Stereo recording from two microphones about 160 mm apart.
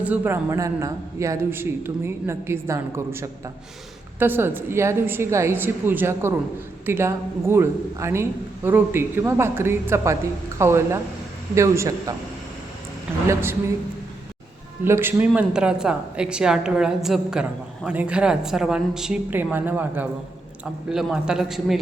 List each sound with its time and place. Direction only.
0.0 s a man's voice: 10° right (ahead or behind)
13.2 s a man's voice: 15° right (ahead or behind)
14.8 s a man's voice: 15° right (ahead or behind)